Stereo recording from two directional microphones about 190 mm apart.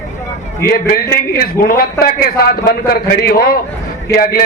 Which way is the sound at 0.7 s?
50° left (ahead or behind).